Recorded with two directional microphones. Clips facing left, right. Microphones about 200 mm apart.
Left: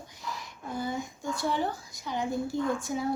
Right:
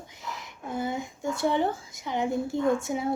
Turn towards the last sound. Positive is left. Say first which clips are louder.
# right 4 dB
turn(degrees=-25)  # may be behind; listen again after turning